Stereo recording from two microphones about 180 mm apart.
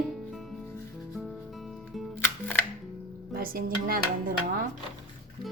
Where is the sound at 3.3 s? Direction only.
55° right (ahead or behind).